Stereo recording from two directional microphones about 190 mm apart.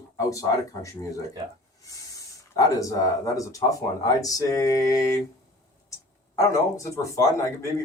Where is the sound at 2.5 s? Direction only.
15° left (ahead or behind).